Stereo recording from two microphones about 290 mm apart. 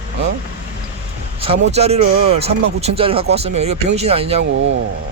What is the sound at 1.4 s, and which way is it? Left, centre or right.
Speech, right.